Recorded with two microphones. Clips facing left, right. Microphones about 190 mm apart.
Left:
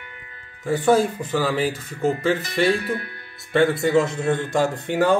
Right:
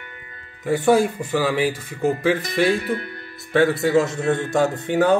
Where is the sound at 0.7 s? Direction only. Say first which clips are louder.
Right 1 dB; 10° right (ahead or behind).